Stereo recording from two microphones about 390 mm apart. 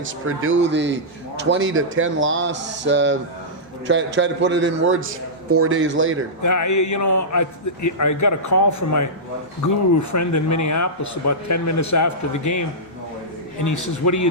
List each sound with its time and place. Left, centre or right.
0.0 s a man's voice: right
6.4 s a man's voice: left
13.7 s a man's voice: left